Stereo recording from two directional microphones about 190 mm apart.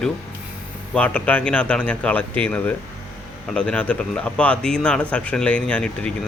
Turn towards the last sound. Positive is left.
turn(degrees=5)  # may be behind; listen again after turning